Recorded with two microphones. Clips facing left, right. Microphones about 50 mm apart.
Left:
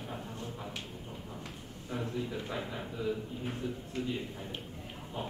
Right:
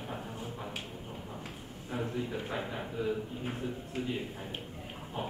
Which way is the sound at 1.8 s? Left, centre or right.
Centre.